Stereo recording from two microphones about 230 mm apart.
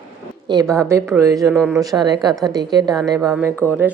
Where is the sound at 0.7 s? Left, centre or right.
Centre.